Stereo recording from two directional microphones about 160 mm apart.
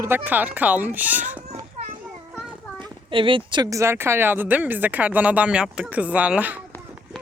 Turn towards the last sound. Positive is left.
turn(degrees=-10)  # may be behind; listen again after turning